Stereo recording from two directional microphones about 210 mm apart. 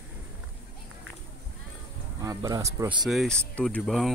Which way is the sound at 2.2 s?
15° right (ahead or behind).